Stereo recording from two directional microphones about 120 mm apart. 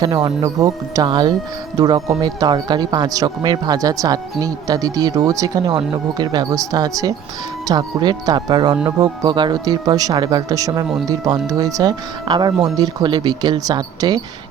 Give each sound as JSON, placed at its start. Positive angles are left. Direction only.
{"t": 0.0, "sound": "speech", "side_deg": -30}